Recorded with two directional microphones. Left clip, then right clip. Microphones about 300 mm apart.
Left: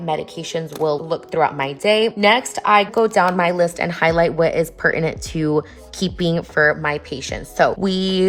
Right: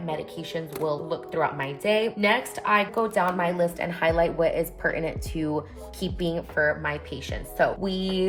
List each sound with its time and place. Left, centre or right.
0.0 s a woman's voice: left